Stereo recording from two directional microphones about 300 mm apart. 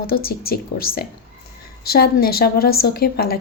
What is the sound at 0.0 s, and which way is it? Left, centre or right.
Speech, left.